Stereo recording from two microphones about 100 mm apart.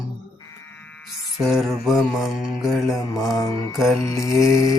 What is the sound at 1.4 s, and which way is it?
Mantra, 5° right (ahead or behind).